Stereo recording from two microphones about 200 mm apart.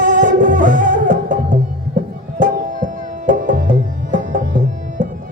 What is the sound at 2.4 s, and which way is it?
Tabla, 40° right (ahead or behind).